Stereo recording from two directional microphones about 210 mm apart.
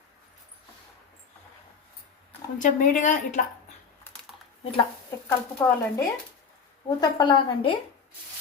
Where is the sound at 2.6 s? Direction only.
35° left (ahead or behind).